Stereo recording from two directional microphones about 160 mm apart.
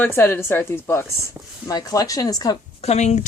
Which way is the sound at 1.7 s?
25° left (ahead or behind).